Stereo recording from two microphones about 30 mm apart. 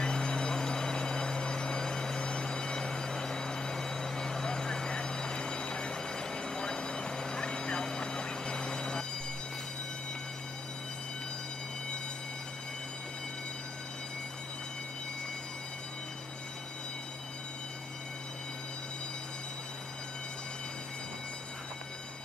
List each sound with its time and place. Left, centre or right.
0.0 s vehicle: left